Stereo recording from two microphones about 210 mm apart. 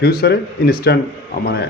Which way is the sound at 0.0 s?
50° left (ahead or behind).